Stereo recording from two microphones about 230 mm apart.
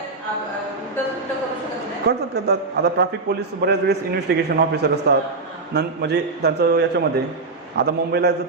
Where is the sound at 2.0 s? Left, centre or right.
Right.